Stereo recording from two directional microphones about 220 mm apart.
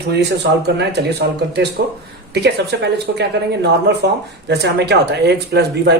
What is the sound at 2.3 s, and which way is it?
Speech, 50° right (ahead or behind).